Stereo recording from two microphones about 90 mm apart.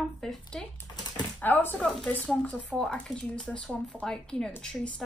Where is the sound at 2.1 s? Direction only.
15° left (ahead or behind).